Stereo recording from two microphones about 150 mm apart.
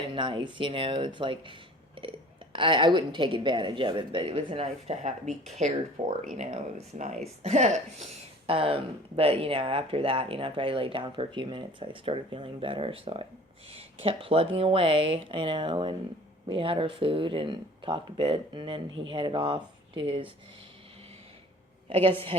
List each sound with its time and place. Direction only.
0.1 s speech: 35° right (ahead or behind)
2.0 s burping: 35° right (ahead or behind)
2.5 s speech: 35° right (ahead or behind)
21.8 s a woman's voice: 40° right (ahead or behind)